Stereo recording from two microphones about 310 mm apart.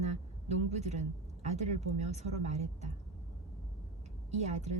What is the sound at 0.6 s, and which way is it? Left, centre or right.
Speech, right.